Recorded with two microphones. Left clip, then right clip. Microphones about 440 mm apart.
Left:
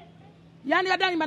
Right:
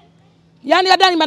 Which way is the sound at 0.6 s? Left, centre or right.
Right.